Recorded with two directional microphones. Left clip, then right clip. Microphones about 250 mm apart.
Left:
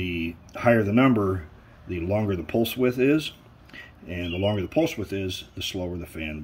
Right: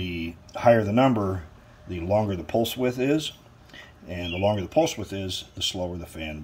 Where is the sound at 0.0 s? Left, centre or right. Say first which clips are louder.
Left 3 dB; centre.